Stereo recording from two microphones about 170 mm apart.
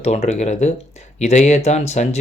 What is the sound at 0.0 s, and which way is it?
Speech, 40° left (ahead or behind).